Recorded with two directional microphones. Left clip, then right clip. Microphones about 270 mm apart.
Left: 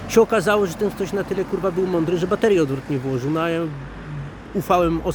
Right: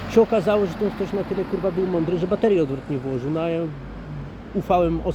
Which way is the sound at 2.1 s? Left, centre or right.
Centre.